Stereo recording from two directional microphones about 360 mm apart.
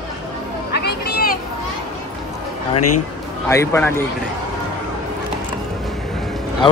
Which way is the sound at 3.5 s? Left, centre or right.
Centre.